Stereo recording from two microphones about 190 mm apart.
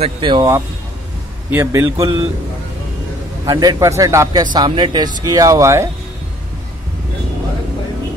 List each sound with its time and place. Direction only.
0.0 s a man's voice: 25° right (ahead or behind)
3.4 s a man's voice: 20° right (ahead or behind)